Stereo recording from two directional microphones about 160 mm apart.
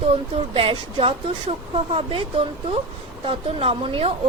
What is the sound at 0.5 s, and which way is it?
A woman's voice, 35° right (ahead or behind).